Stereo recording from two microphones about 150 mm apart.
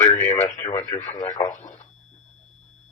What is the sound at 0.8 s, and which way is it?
Speech, 50° left (ahead or behind).